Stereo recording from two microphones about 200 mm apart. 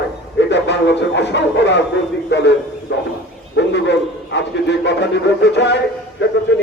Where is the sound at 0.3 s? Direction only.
60° left (ahead or behind).